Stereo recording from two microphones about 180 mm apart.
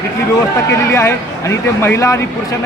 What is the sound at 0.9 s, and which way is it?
Speech, 15° left (ahead or behind).